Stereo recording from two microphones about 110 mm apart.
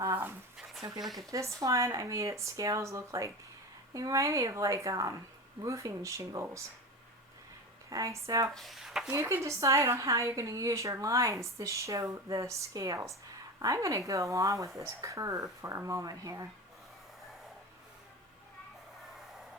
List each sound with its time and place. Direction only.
0.0 s dog: 25° right (ahead or behind)
0.9 s speech: centre (ahead or behind)
1.3 s a woman's voice: 30° right (ahead or behind)
7.9 s a woman's voice: 30° right (ahead or behind)
8.4 s speech: centre (ahead or behind)
9.1 s a woman's voice: 25° right (ahead or behind)